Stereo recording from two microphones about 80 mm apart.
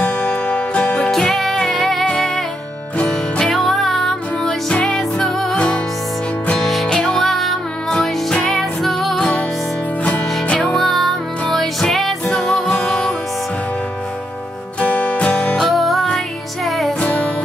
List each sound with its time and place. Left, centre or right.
0.0 s music: centre
6.6 s music: centre
7.0 s music: centre
7.2 s music: centre
10.4 s music: centre
10.8 s music: centre
14.8 s music: left
15.3 s music: centre